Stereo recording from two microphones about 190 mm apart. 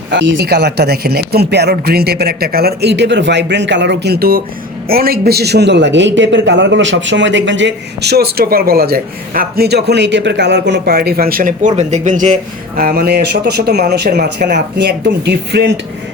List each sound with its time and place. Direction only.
0.1 s a man's voice: 70° right (ahead or behind)